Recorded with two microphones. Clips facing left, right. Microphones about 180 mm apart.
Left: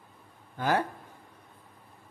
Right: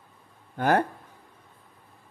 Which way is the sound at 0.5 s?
55° right (ahead or behind).